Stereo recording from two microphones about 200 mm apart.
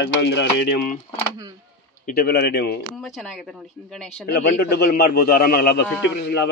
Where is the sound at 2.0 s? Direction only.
50° left (ahead or behind).